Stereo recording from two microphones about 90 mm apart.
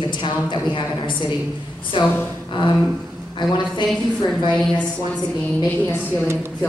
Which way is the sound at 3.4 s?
55° left (ahead or behind).